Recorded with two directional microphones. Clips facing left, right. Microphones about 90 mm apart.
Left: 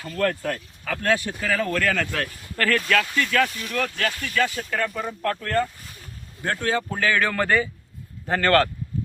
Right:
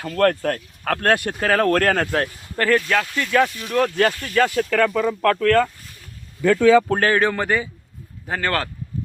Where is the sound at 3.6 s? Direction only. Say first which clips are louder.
Right 7 dB; 35° right (ahead or behind); by 4.6 s 55° right (ahead or behind).